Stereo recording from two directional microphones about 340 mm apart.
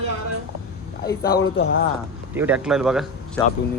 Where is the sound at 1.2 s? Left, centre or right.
Left.